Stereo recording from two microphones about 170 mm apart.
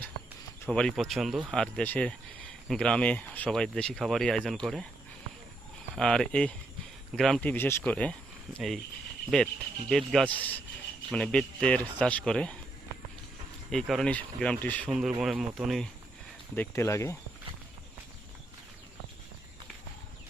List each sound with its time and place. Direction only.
0.6 s speech: 5° left (ahead or behind)
5.9 s speech: 5° left (ahead or behind)
9.9 s speech: centre (ahead or behind)
13.7 s speech: centre (ahead or behind)
14.8 s speech: centre (ahead or behind)
16.6 s speech: 15° left (ahead or behind)